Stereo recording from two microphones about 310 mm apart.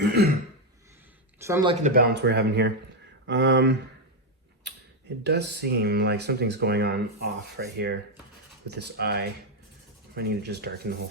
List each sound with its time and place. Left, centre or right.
0.0 s throat clearing: right
1.4 s speech: centre
1.8 s speech: right
5.2 s speech: right